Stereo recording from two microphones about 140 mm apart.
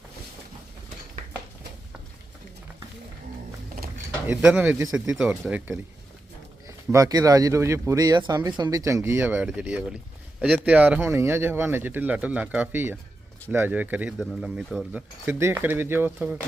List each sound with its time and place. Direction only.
4.3 s speech: 10° right (ahead or behind)
6.7 s speech: 25° right (ahead or behind); by 15.0 s 5° right (ahead or behind)
15.3 s speech: 15° right (ahead or behind)